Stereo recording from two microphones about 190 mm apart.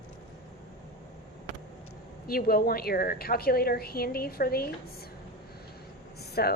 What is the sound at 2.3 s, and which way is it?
A woman's voice, 50° left (ahead or behind).